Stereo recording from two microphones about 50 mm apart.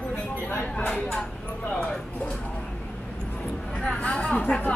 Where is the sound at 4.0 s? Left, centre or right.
Left.